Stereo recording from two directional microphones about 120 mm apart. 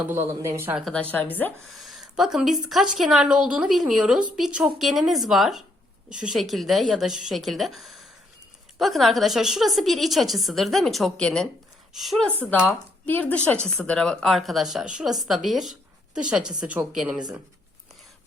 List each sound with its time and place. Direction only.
0.0 s speech: 20° right (ahead or behind)
1.1 s a woman's voice: 15° left (ahead or behind)
1.6 s speech: centre (ahead or behind)
13.1 s a woman's voice: 15° left (ahead or behind); by 17.2 s 5° right (ahead or behind)